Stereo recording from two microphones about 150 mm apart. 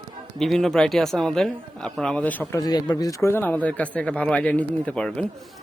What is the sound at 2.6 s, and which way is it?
Speech, 25° left (ahead or behind).